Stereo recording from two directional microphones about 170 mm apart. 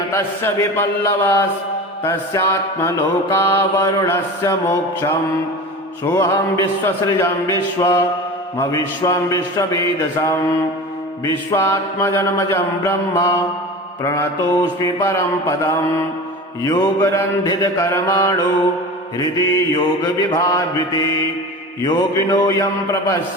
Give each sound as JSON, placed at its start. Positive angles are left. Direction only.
{"t": 0.1, "sound": "mantra", "side_deg": 15}
{"t": 8.5, "sound": "a man's voice", "side_deg": 20}
{"t": 11.3, "sound": "mantra", "side_deg": 15}
{"t": 19.2, "sound": "a man's voice", "side_deg": 20}